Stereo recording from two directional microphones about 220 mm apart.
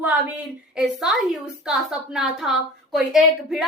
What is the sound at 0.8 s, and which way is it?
A woman's voice, centre (ahead or behind).